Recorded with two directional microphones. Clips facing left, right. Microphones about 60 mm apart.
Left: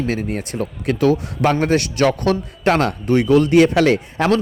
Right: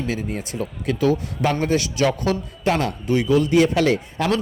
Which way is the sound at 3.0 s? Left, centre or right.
Left.